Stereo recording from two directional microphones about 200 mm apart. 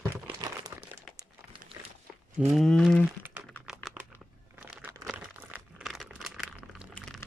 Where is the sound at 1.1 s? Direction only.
25° right (ahead or behind).